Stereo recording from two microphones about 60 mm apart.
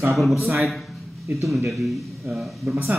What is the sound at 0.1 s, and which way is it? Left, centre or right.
Speech, centre.